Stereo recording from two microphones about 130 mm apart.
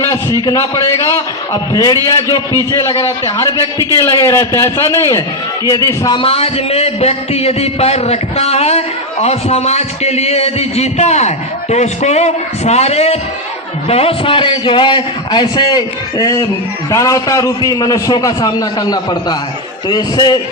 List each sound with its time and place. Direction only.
0.4 s a man's voice: 25° left (ahead or behind)
6.1 s a man's voice: 50° left (ahead or behind); by 20.4 s 30° left (ahead or behind)